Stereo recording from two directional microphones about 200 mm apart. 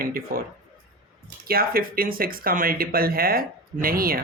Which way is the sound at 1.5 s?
45° right (ahead or behind).